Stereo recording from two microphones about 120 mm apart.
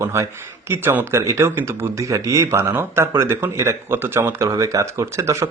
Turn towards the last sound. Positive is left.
turn(degrees=-25)  # may be behind; listen again after turning